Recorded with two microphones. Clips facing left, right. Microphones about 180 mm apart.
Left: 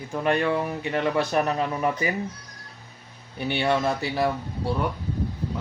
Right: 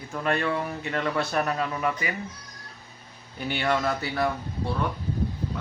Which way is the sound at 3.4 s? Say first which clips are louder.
Left 2 dB; 25° left (ahead or behind).